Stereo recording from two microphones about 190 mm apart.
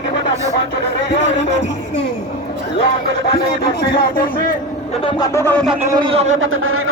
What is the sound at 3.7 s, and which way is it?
Speech, 50° left (ahead or behind).